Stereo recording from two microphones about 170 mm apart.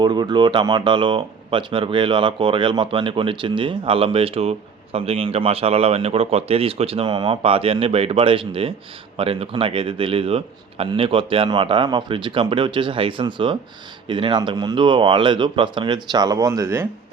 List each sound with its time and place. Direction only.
0.0 s speech: 25° right (ahead or behind)